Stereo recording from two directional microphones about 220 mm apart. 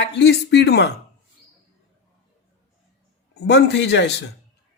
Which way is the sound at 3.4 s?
50° left (ahead or behind).